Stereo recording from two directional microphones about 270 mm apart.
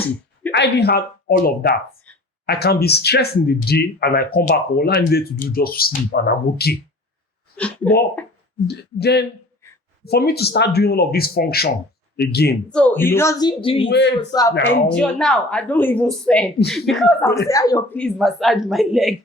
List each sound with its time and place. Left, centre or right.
0.5 s speech: left
7.5 s speech: centre
8.6 s speech: left
12.7 s speech: centre
13.8 s speech: left
14.8 s speech: centre